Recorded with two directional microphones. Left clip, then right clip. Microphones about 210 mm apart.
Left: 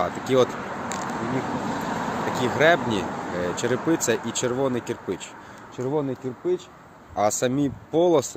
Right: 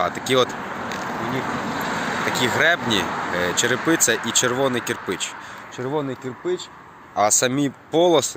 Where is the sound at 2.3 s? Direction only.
Centre (ahead or behind).